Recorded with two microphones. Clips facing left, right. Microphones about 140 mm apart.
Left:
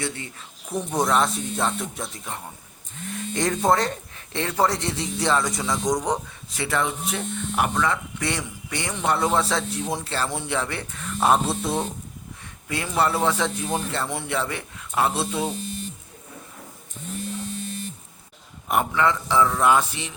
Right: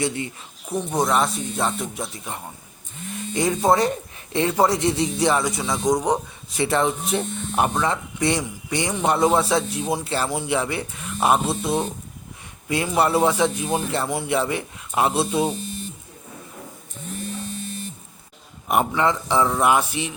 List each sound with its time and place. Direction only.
0.7 s a man's voice: centre (ahead or behind)
12.6 s a man's voice: 20° right (ahead or behind)
18.7 s a man's voice: 20° right (ahead or behind)